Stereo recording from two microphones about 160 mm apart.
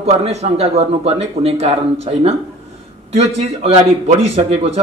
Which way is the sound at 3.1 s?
40° right (ahead or behind).